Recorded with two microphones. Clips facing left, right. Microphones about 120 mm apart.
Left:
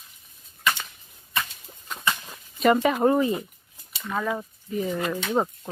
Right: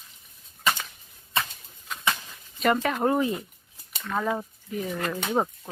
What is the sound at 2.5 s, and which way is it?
Speech, 5° left (ahead or behind).